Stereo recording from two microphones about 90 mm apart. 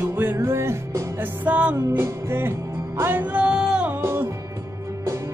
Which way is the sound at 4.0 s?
25° right (ahead or behind).